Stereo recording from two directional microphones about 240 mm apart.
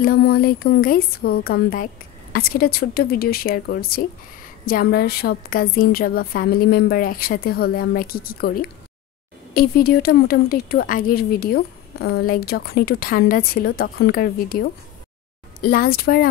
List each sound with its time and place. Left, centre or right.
0.0 s speech: left